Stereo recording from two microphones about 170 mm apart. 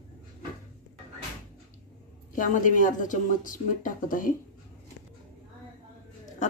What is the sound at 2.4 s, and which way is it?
A woman's voice, 50° left (ahead or behind).